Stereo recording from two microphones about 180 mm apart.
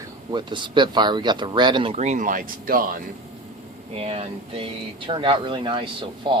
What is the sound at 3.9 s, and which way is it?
Speech, 35° right (ahead or behind).